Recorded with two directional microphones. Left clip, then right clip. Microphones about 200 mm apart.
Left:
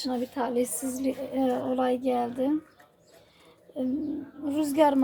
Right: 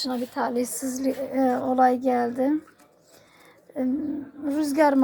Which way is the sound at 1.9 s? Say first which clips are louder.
Right 5 dB; centre (ahead or behind).